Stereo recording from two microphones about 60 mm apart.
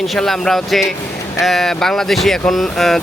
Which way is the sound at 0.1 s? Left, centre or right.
Centre.